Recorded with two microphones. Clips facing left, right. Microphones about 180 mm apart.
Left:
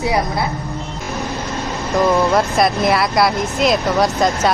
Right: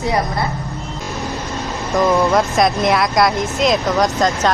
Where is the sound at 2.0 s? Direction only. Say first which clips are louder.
Even; centre (ahead or behind).